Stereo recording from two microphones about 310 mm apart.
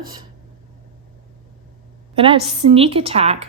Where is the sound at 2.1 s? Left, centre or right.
Centre.